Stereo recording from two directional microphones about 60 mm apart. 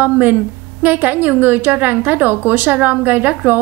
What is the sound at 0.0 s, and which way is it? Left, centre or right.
A woman's voice, right.